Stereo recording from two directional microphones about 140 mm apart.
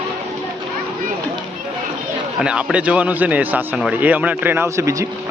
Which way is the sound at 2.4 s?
5° right (ahead or behind).